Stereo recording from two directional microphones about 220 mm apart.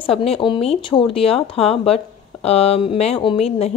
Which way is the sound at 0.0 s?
25° left (ahead or behind).